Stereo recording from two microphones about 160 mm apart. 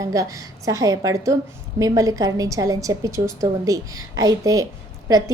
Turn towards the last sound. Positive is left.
turn(degrees=-20)  # may be behind; listen again after turning